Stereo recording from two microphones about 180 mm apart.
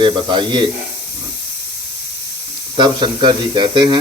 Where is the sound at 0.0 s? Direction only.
25° right (ahead or behind).